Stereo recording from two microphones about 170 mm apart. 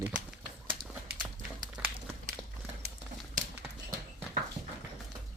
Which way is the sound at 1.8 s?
5° right (ahead or behind).